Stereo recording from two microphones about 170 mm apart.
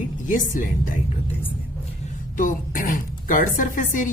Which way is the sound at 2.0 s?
50° left (ahead or behind).